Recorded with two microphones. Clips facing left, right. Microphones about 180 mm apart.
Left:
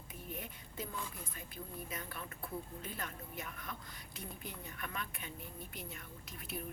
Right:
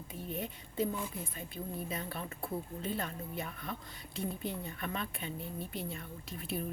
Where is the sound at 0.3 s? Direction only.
25° right (ahead or behind).